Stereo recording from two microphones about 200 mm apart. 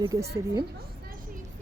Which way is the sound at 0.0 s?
20° right (ahead or behind).